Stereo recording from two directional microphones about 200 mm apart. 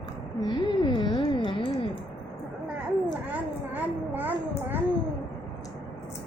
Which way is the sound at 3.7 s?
10° right (ahead or behind).